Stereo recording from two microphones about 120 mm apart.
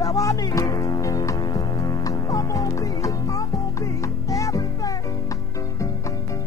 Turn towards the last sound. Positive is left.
turn(degrees=30)  # may be behind; listen again after turning